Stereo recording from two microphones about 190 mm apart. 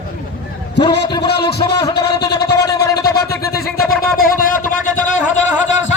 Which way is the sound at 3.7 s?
50° left (ahead or behind).